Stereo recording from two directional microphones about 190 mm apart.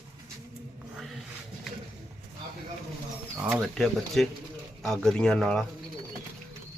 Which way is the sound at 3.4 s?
5° right (ahead or behind).